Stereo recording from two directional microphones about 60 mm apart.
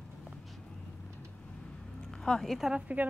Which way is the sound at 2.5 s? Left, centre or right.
Centre.